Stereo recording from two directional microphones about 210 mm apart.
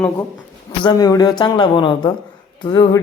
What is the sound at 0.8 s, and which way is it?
Speech, 20° left (ahead or behind).